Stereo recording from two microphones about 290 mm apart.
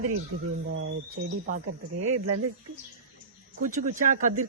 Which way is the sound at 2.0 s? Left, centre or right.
Right.